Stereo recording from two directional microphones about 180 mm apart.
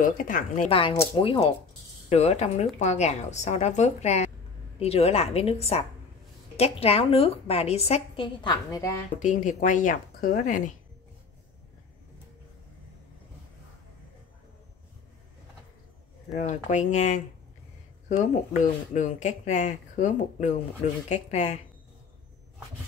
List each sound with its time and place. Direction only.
0.0 s speech: 45° left (ahead or behind)
0.7 s a woman's voice: 30° left (ahead or behind)
9.2 s speech: 45° left (ahead or behind)
16.3 s a woman's voice: 40° left (ahead or behind)